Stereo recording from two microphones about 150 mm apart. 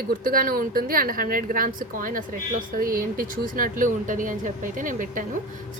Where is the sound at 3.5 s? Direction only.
65° right (ahead or behind).